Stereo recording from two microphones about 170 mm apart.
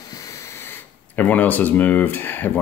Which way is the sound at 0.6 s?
10° left (ahead or behind).